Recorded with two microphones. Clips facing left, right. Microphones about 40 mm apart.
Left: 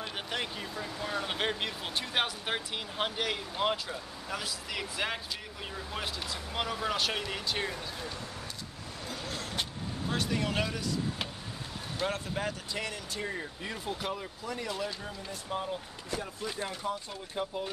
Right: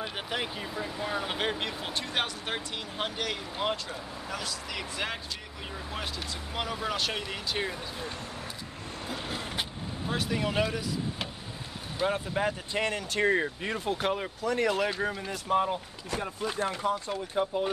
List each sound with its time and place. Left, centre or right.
0.0 s speech: centre
6.5 s speech: centre
9.1 s speech: right
12.7 s speech: right
13.1 s speech: right
13.6 s speech: right
14.4 s speech: right
16.1 s speech: right
17.4 s speech: right